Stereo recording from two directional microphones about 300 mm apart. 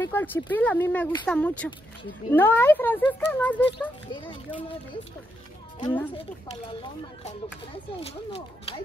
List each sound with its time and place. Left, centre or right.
0.0 s speech: centre
4.1 s speech: centre
5.8 s speech: centre